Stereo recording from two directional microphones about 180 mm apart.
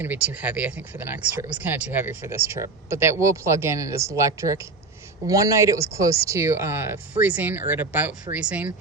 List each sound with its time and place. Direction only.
0.0 s speech: 10° right (ahead or behind)